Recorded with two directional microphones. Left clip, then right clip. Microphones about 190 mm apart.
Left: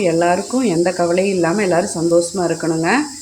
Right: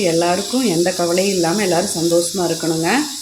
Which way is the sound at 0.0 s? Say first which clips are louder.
Left 1 dB; centre (ahead or behind).